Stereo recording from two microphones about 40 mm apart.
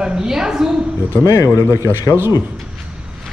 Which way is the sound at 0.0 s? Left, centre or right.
Centre.